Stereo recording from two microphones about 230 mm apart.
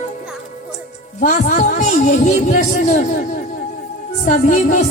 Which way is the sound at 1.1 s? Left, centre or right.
Left.